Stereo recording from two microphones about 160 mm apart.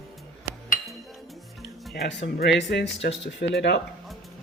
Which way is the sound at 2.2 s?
90° left.